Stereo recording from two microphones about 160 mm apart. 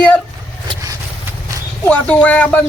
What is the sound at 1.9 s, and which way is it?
Speech, 10° left (ahead or behind).